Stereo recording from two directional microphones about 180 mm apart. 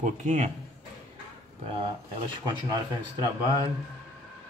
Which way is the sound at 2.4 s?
25° right (ahead or behind).